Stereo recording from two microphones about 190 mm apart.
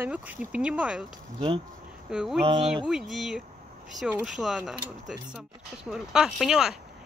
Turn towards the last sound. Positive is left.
turn(degrees=0)  # may be behind; listen again after turning